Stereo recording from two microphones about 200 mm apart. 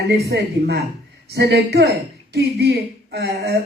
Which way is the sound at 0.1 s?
55° right (ahead or behind).